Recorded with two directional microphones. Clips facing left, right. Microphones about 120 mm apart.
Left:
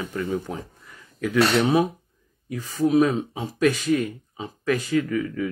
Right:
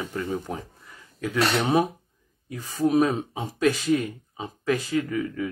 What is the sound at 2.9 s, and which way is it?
Speech, 20° right (ahead or behind).